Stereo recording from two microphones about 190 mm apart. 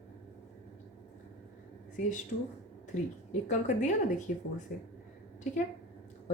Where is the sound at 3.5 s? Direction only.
40° left (ahead or behind).